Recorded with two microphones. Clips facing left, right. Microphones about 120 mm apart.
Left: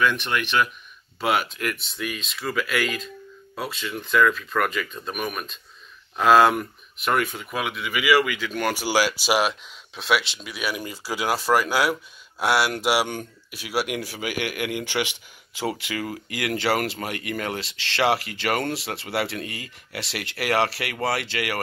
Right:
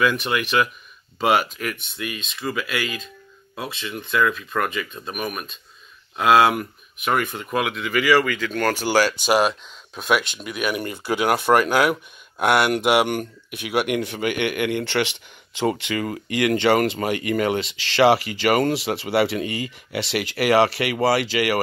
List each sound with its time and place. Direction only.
0.0 s speech: 5° right (ahead or behind)
10.8 s speech: 55° right (ahead or behind)
12.4 s speech: 5° left (ahead or behind)